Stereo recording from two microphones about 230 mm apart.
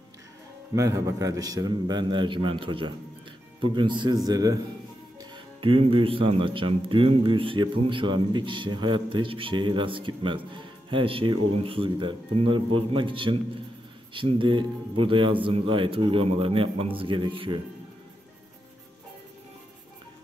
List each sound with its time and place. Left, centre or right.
0.7 s speech: centre